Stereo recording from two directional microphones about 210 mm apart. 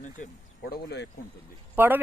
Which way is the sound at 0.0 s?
40° left (ahead or behind).